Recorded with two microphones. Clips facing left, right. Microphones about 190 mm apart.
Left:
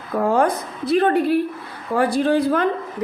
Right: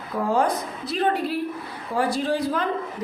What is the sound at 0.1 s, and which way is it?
A woman's voice, 55° left (ahead or behind).